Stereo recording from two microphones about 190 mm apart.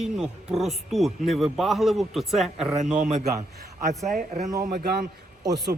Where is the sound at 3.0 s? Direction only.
40° right (ahead or behind).